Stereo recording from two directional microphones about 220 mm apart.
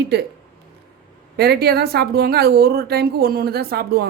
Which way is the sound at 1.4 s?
45° right (ahead or behind).